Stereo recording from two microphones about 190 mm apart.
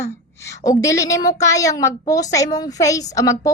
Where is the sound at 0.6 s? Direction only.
20° left (ahead or behind).